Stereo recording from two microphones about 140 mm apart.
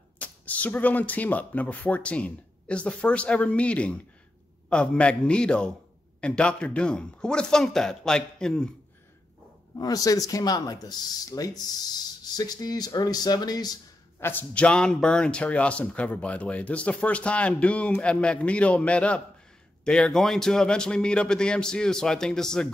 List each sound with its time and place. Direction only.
0.2 s a man's voice: 10° left (ahead or behind)
9.8 s speech: 25° left (ahead or behind)
14.2 s a man's voice: 10° left (ahead or behind)